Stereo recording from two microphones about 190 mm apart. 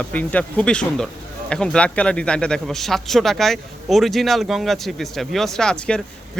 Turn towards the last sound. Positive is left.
turn(degrees=5)  # may be behind; listen again after turning